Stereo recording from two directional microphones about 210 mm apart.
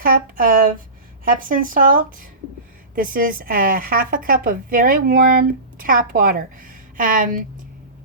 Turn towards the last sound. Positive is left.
turn(degrees=-40)  # may be behind; listen again after turning